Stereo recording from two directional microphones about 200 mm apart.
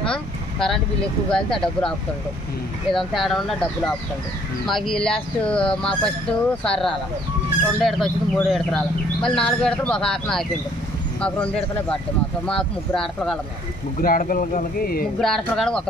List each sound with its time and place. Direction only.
0.1 s speech: 5° left (ahead or behind)
2.9 s speech: centre (ahead or behind)
14.0 s speech: 45° left (ahead or behind)
15.1 s speech: centre (ahead or behind)